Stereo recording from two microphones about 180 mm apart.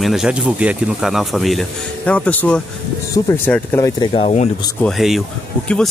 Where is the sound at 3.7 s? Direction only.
15° left (ahead or behind).